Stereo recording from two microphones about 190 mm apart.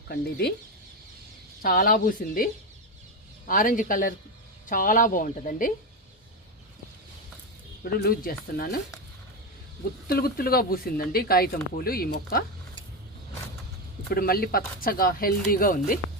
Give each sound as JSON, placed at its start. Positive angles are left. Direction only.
{"t": 0.1, "sound": "speech", "side_deg": 55}
{"t": 1.6, "sound": "speech", "side_deg": 50}
{"t": 7.9, "sound": "speech", "side_deg": 50}
{"t": 10.1, "sound": "speech", "side_deg": 55}
{"t": 14.1, "sound": "speech", "side_deg": 50}